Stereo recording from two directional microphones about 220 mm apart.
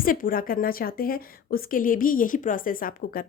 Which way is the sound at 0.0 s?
40° left (ahead or behind).